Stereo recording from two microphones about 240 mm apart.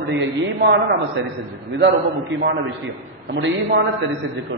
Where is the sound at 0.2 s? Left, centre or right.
Right.